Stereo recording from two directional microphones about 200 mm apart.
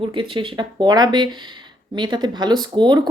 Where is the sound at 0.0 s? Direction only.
25° right (ahead or behind).